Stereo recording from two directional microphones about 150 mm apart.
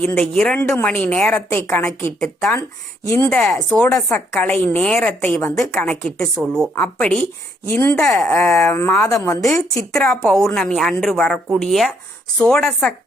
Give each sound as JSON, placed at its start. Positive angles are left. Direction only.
{"t": 0.0, "sound": "a woman's voice", "side_deg": 10}
{"t": 2.5, "sound": "a woman's voice", "side_deg": 20}
{"t": 3.8, "sound": "a woman's voice", "side_deg": 20}
{"t": 7.9, "sound": "a woman's voice", "side_deg": 5}
{"t": 9.9, "sound": "a woman's voice", "side_deg": 5}